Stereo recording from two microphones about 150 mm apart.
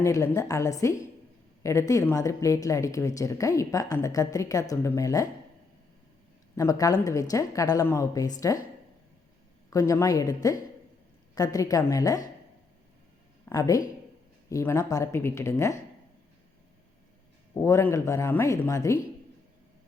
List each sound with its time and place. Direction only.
0.0 s a woman's voice: 20° left (ahead or behind)
6.6 s a woman's voice: 20° left (ahead or behind)
9.6 s a woman's voice: 20° left (ahead or behind)
13.4 s a woman's voice: 20° left (ahead or behind)
17.5 s a woman's voice: 20° left (ahead or behind)